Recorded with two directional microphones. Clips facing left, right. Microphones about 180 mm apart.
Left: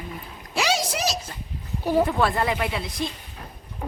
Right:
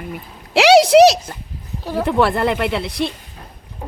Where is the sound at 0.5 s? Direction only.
75° right (ahead or behind).